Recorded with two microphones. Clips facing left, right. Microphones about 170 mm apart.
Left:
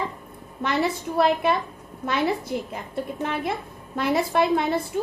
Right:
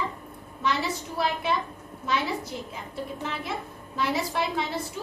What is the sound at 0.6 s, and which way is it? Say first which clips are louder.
A woman's voice: left 4 dB; 55° left (ahead or behind).